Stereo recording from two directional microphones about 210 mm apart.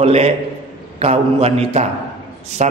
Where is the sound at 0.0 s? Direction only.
30° right (ahead or behind).